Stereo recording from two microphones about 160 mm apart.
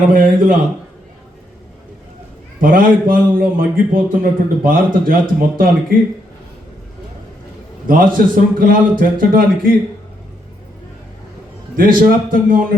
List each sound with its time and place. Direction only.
0.1 s a man's voice: 60° right (ahead or behind)
2.6 s a man's voice: 60° right (ahead or behind)
7.9 s a man's voice: 60° right (ahead or behind)
11.8 s a man's voice: 60° right (ahead or behind)